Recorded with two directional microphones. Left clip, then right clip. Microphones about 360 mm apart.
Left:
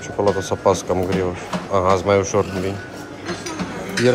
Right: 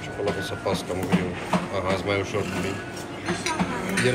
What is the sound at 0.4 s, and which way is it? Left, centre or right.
Speech, centre.